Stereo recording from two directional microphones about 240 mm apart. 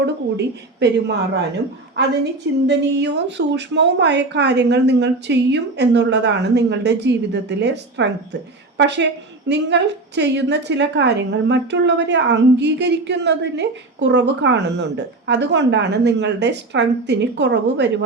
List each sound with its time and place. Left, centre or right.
0.0 s a woman's voice: right
2.6 s a woman's voice: right